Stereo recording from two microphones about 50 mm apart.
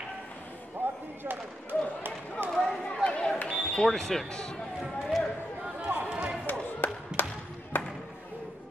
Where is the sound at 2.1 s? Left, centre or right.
Right.